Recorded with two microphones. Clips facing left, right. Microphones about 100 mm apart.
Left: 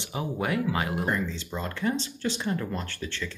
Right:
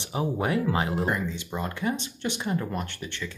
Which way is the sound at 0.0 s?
25° right (ahead or behind).